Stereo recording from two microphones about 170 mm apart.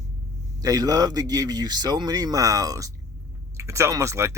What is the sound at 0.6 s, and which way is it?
Speech, 20° right (ahead or behind).